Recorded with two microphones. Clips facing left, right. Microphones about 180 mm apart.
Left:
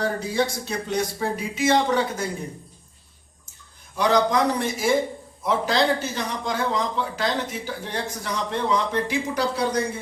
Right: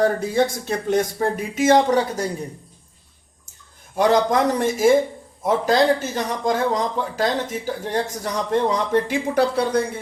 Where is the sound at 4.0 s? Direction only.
45° right (ahead or behind).